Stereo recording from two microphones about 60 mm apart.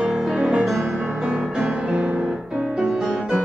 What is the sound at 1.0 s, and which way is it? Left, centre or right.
Music, centre.